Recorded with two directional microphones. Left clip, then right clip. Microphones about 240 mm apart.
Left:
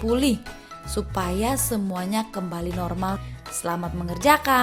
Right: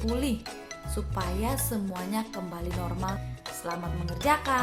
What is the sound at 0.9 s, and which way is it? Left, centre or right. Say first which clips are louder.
Speech: left 8 dB; left.